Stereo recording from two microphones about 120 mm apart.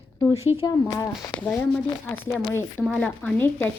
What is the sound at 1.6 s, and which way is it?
Speech, 20° left (ahead or behind).